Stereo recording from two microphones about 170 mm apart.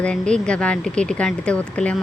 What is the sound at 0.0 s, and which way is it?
Speech, 5° left (ahead or behind).